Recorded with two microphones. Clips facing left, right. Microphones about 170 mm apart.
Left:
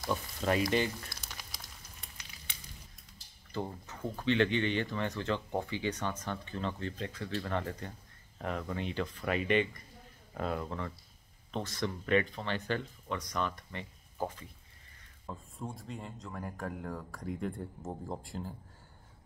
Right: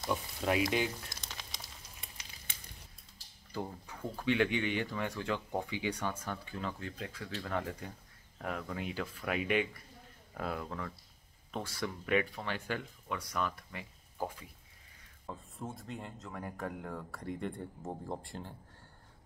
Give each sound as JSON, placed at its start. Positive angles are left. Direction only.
{"t": 0.4, "sound": "speech", "side_deg": -10}
{"t": 2.5, "sound": "a sound", "side_deg": -45}
{"t": 3.5, "sound": "speech", "side_deg": -10}
{"t": 15.2, "sound": "speech", "side_deg": 0}